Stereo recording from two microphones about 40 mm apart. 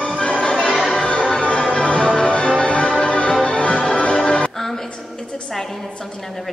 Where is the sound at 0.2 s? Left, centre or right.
Left.